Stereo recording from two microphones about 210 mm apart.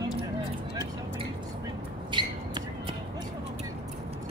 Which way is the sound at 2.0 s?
20° right (ahead or behind).